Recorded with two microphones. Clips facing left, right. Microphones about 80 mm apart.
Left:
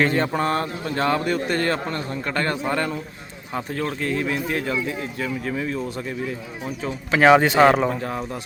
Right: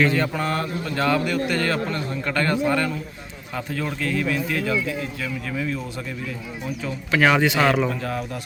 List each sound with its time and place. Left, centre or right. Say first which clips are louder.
0.0 s a man's voice: left 1 dB; left
6.8 s a man's voice: left 4 dB; left